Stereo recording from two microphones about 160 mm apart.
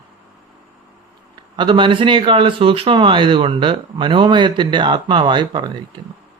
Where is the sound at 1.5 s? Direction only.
30° right (ahead or behind).